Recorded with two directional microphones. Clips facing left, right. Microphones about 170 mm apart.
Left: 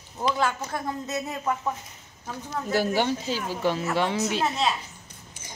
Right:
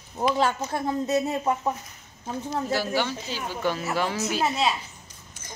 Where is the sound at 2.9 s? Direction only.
40° left (ahead or behind).